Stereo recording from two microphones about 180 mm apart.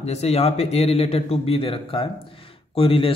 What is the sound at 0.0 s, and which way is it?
A man's voice, 35° left (ahead or behind).